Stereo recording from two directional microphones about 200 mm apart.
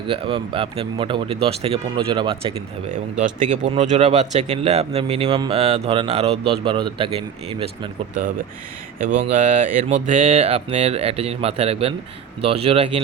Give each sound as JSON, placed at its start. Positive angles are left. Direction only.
{"t": 0.1, "sound": "speech", "side_deg": -25}
{"t": 2.9, "sound": "speech", "side_deg": -40}
{"t": 9.0, "sound": "speech", "side_deg": -35}